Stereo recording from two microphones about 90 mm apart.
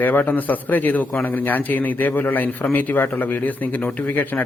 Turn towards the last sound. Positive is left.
turn(degrees=20)  # may be behind; listen again after turning